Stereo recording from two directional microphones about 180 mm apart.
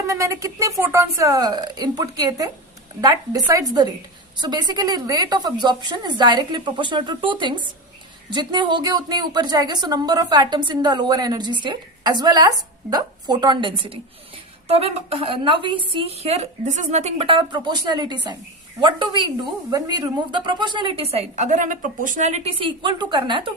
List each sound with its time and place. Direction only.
0.1 s a woman's voice: 15° right (ahead or behind)